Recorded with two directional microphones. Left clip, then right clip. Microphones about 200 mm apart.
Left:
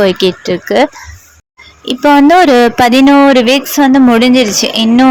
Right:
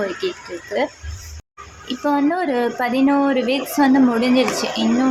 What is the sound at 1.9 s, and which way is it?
Speech, 45° left (ahead or behind).